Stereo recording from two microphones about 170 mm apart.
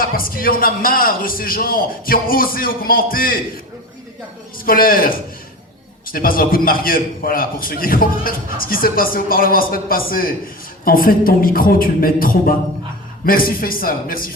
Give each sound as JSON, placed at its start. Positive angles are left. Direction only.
{"t": 0.0, "sound": "a man's voice", "side_deg": 60}
{"t": 4.6, "sound": "a man's voice", "side_deg": 60}